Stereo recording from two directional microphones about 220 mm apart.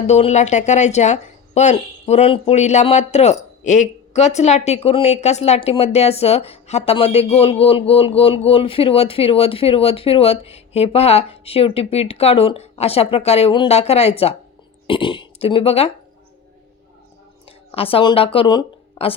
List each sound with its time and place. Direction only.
0.1 s speech: 30° left (ahead or behind)
17.7 s a woman's voice: 25° left (ahead or behind)